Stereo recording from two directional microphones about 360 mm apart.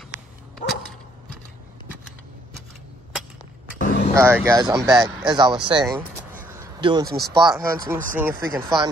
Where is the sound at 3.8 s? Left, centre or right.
Left.